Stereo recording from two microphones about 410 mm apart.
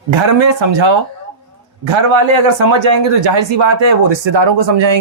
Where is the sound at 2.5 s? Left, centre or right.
Right.